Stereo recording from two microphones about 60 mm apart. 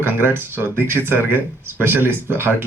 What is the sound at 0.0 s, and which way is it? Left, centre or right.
Speech, right.